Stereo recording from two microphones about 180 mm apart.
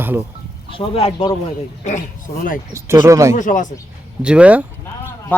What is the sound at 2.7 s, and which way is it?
Speech, 15° right (ahead or behind).